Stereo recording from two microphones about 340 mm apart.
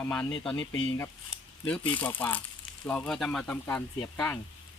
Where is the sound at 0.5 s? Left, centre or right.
Left.